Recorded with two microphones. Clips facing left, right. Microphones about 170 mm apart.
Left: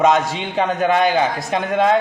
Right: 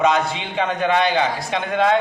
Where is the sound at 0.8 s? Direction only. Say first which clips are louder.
Left 2 dB; 45° left (ahead or behind).